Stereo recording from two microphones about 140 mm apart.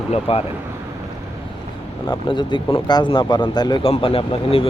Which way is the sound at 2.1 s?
35° left (ahead or behind).